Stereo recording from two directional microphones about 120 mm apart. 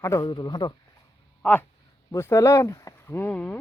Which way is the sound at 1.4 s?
15° left (ahead or behind).